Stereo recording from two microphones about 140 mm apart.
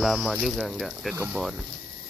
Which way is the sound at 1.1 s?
15° right (ahead or behind).